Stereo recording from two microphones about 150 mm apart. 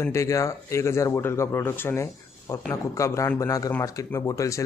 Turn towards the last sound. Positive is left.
turn(degrees=20)  # may be behind; listen again after turning